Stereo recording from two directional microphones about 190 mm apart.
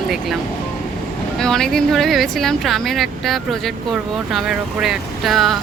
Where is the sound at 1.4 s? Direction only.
5° left (ahead or behind).